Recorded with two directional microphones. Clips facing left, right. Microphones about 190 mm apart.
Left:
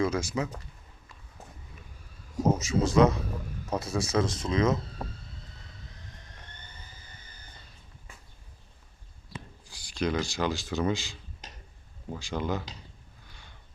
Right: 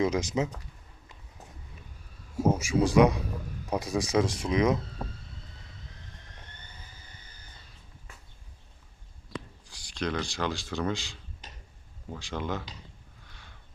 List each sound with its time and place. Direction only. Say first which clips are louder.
0.0 s speech: right 1 dB; 20° right (ahead or behind)
2.4 s speech: right 1 dB; 10° right (ahead or behind)
9.6 s speech: left 3 dB; centre (ahead or behind)